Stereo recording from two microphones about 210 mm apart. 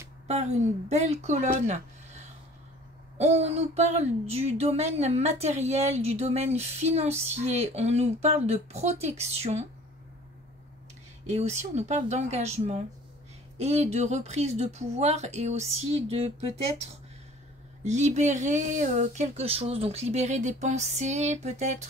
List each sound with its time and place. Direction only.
0.3 s speech: 30° right (ahead or behind)
11.2 s speech: 30° right (ahead or behind)
17.8 s speech: 35° right (ahead or behind)